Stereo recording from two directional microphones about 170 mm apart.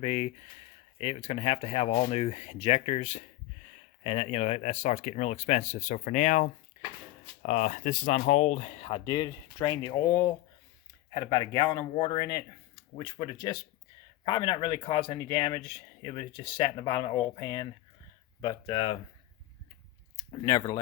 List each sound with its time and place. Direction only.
0.0 s speech: 40° left (ahead or behind)
20.1 s speech: 25° left (ahead or behind)